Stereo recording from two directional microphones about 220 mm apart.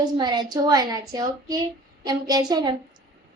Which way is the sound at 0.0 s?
20° right (ahead or behind).